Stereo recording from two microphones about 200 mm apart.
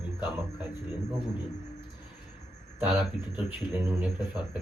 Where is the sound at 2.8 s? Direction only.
10° right (ahead or behind).